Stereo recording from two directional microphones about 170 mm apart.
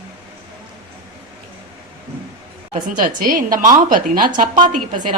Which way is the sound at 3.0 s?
55° right (ahead or behind).